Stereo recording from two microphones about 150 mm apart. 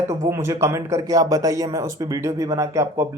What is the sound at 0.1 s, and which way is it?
Speech, 20° right (ahead or behind).